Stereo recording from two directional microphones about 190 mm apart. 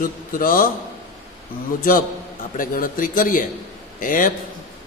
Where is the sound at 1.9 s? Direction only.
45° left (ahead or behind).